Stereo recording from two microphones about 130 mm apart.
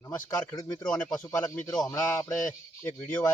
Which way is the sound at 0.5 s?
30° left (ahead or behind).